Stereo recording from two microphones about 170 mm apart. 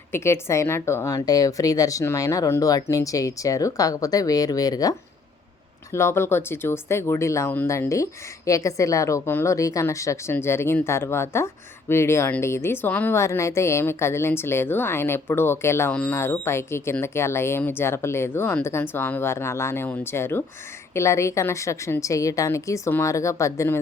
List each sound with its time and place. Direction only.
0.1 s a woman's voice: 15° left (ahead or behind)